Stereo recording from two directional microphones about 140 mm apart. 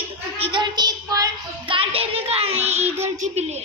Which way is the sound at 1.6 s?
40° right (ahead or behind).